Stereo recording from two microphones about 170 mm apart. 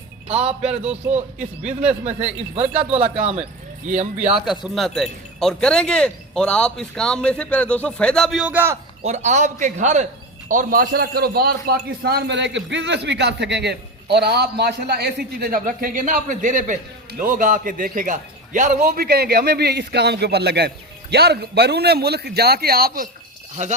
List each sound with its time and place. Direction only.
0.3 s a man's voice: 5° right (ahead or behind)
0.6 s a man's voice: 40° right (ahead or behind)
1.6 s a man's voice: 5° right (ahead or behind)
2.0 s a man's voice: 40° right (ahead or behind)
3.8 s a man's voice: 45° right (ahead or behind)
4.4 s speech: centre (ahead or behind)
9.0 s a man's voice: 45° right (ahead or behind); by 23.0 s 65° right (ahead or behind)
23.6 s a man's voice: 45° right (ahead or behind)